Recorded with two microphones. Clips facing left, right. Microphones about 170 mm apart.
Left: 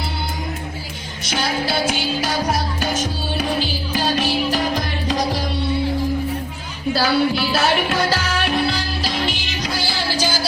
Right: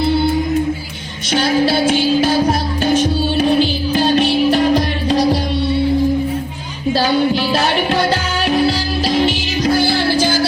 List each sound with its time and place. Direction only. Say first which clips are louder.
1.3 s music: right 8 dB; 30° right (ahead or behind)
7.0 s music: right 2 dB; 35° right (ahead or behind)
9.6 s music: right 10 dB; 55° right (ahead or behind)